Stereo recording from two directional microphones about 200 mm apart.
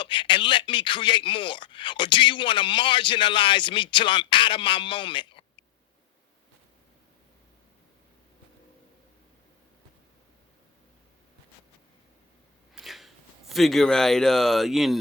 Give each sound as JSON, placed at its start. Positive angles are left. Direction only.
{"t": 0.0, "sound": "speech", "side_deg": 25}
{"t": 12.7, "sound": "speech", "side_deg": 0}